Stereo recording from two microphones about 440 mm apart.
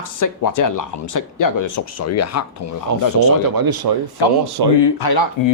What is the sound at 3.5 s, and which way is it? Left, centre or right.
Speech, right.